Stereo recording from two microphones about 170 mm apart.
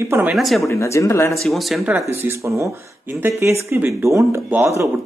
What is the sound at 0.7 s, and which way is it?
Speech, 15° left (ahead or behind).